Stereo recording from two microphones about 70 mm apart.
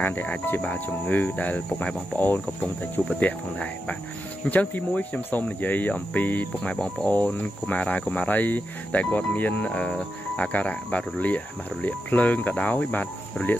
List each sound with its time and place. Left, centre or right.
0.0 s cricket: left
6.7 s speech: centre
7.1 s cricket: left